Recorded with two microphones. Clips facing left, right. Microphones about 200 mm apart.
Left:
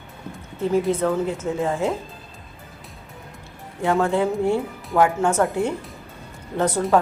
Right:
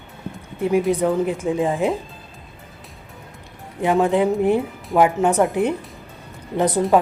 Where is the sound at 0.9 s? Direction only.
15° right (ahead or behind).